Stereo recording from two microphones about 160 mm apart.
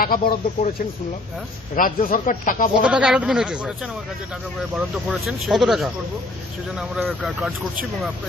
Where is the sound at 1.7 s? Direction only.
60° left (ahead or behind).